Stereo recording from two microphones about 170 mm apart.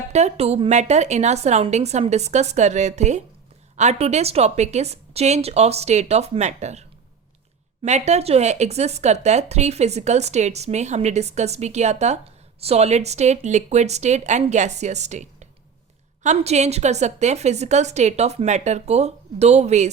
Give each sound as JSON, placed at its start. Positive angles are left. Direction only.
{"t": 0.1, "sound": "speech", "side_deg": -40}